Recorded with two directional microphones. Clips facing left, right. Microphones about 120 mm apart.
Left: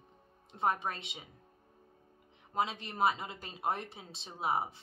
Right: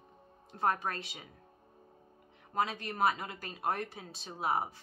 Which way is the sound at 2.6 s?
25° left (ahead or behind).